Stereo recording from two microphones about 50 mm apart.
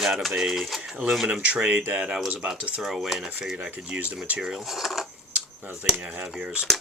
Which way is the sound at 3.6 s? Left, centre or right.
Right.